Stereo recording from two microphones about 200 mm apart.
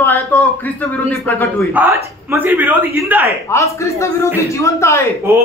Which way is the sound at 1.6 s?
10° right (ahead or behind).